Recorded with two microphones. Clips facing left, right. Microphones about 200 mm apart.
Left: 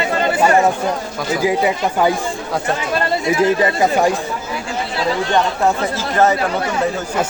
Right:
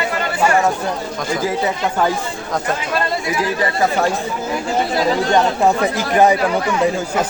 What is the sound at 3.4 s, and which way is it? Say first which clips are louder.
Speech: left 3 dB; 15° left (ahead or behind).